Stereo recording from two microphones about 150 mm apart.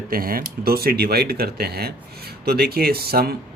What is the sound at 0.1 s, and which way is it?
Speech, 75° right (ahead or behind).